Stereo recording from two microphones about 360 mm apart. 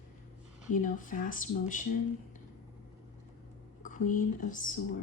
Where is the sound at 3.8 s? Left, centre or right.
Left.